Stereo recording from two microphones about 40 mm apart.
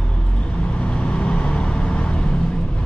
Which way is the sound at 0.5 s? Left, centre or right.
Left.